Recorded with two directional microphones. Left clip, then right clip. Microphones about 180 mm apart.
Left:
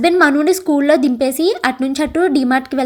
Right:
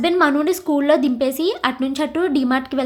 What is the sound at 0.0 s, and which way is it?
Speech, 25° left (ahead or behind).